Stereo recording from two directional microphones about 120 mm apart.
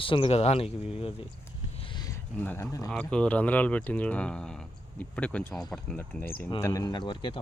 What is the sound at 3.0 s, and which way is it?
Speech, 10° left (ahead or behind).